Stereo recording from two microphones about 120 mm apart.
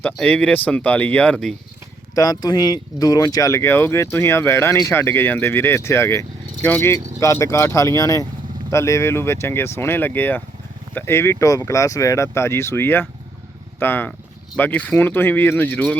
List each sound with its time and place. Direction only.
0.0 s speech: 10° left (ahead or behind)
2.1 s speech: 30° left (ahead or behind); by 16.0 s 15° left (ahead or behind)